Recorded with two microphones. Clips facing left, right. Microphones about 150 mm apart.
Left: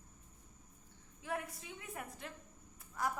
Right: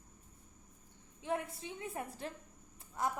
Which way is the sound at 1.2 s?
25° right (ahead or behind).